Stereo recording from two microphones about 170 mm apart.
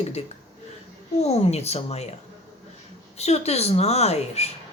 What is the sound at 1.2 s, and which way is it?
Speech, 40° left (ahead or behind).